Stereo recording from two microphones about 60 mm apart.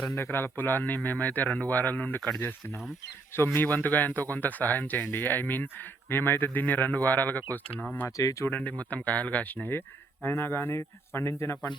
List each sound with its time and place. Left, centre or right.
0.2 s speech: left
3.3 s speech: left
8.0 s speech: left
8.4 s speech: left
10.2 s speech: left